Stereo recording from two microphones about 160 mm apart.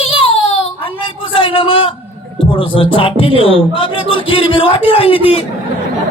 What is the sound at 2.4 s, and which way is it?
A man's voice, 35° left (ahead or behind).